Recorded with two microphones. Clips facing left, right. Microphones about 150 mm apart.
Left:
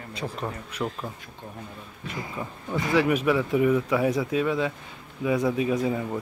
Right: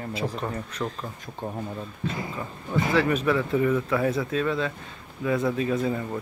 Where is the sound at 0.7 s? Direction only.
10° left (ahead or behind).